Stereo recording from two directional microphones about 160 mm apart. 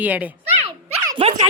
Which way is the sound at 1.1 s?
40° right (ahead or behind).